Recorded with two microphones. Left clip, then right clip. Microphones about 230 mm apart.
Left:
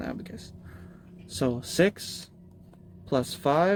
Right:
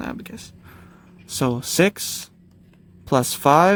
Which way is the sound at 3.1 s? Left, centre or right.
Right.